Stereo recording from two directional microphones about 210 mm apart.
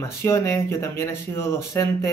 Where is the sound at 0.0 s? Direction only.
10° left (ahead or behind).